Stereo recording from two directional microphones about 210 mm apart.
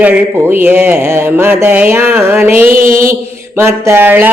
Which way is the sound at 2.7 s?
40° right (ahead or behind).